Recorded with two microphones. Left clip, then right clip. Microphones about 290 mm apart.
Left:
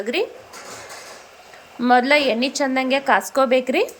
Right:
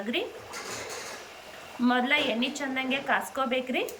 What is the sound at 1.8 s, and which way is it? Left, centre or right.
A woman's voice, centre.